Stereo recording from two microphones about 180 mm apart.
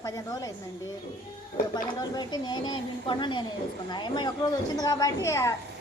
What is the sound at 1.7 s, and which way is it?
Speech, 25° left (ahead or behind).